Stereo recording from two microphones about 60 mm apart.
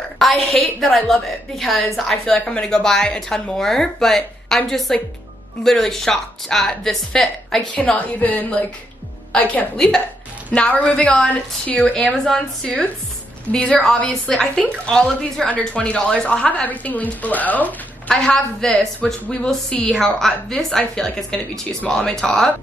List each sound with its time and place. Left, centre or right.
0.2 s a woman's voice: centre
7.8 s a woman's voice: left
9.8 s a woman's voice: centre
15.4 s a woman's voice: left
15.8 s a woman's voice: centre
18.1 s a woman's voice: centre
19.2 s a woman's voice: left
19.9 s a woman's voice: centre